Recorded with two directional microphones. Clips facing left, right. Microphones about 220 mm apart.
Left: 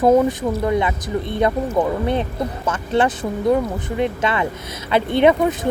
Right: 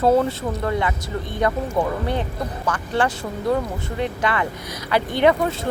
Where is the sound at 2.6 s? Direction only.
20° left (ahead or behind).